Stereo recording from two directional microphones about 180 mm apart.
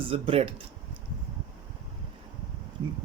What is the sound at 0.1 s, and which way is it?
Speech, 30° right (ahead or behind).